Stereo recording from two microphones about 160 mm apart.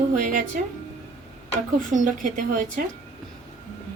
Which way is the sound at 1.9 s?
55° right (ahead or behind).